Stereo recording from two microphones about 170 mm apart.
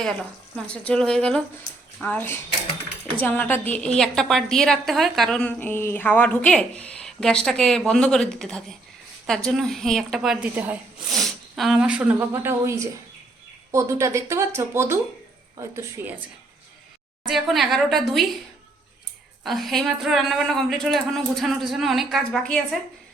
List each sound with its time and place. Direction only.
0.0 s a woman's voice: 5° left (ahead or behind)
11.1 s speech: centre (ahead or behind); by 16.1 s 15° right (ahead or behind)
17.2 s a woman's voice: centre (ahead or behind)
19.5 s a woman's voice: centre (ahead or behind)